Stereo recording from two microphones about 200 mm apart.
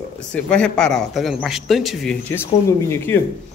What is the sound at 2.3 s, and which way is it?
Speech, 10° left (ahead or behind).